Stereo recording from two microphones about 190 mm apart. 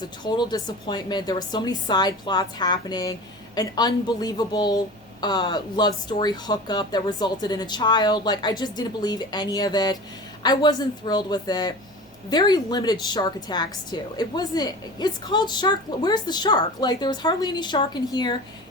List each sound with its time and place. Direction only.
0.3 s a woman's voice: 20° left (ahead or behind)